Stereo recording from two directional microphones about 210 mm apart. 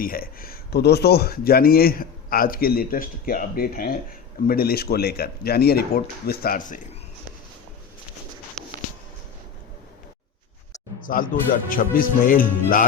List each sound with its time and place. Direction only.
0.0 s speech: 45° left (ahead or behind)
11.0 s speech: 40° left (ahead or behind)